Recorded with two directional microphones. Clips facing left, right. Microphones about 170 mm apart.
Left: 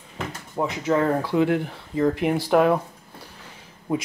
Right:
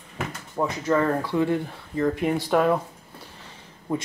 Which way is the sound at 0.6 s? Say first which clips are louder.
Left 1 dB; 15° left (ahead or behind).